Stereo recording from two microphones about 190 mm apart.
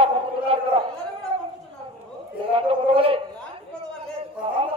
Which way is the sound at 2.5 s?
30° right (ahead or behind).